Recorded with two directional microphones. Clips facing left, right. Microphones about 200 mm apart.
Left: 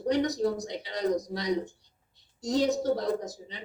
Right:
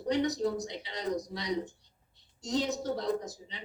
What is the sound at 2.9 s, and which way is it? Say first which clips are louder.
Speech: left 3 dB; 45° left (ahead or behind).